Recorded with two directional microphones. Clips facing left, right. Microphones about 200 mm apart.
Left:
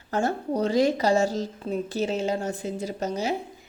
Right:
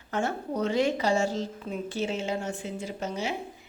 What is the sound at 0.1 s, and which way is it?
A woman's voice, 35° left (ahead or behind).